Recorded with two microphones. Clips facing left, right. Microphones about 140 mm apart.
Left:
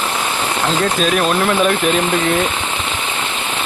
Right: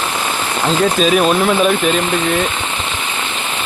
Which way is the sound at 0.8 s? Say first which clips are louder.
Right 5 dB; centre (ahead or behind).